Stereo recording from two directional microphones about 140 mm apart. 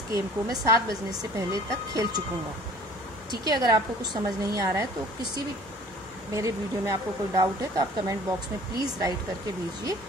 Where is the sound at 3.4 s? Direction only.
30° right (ahead or behind).